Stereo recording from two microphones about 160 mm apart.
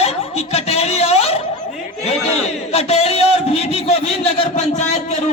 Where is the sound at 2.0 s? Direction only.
40° left (ahead or behind).